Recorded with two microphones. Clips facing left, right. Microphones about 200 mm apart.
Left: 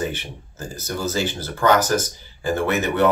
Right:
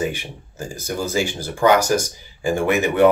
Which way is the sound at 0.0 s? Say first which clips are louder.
Right 2 dB; 10° right (ahead or behind).